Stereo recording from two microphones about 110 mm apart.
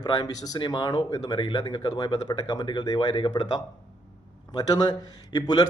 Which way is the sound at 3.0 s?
50° left (ahead or behind).